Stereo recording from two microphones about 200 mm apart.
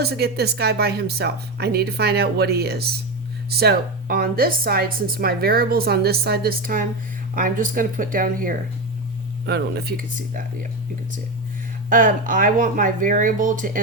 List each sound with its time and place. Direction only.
0.0 s a woman's voice: 55° right (ahead or behind)
9.5 s a woman's voice: 55° right (ahead or behind)
11.9 s speech: 40° right (ahead or behind)